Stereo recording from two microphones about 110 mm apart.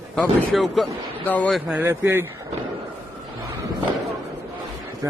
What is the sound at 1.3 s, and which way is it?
Speech, 10° left (ahead or behind).